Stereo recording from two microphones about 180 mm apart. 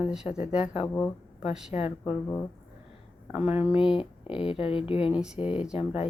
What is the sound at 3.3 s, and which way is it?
Speech, 10° right (ahead or behind).